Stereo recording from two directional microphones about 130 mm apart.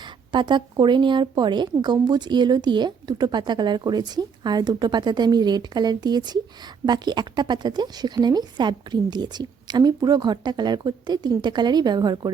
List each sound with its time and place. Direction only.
0.3 s a woman's voice: 35° right (ahead or behind)